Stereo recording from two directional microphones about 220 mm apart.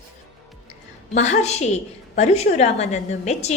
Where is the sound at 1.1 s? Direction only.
30° left (ahead or behind).